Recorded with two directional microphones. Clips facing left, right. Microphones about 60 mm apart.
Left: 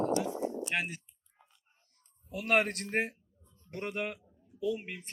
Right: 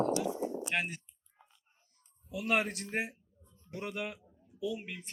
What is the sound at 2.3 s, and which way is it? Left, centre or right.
Speech, left.